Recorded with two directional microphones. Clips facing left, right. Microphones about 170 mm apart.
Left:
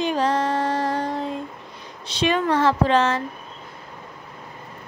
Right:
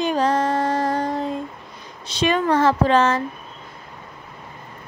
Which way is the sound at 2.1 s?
45° right (ahead or behind).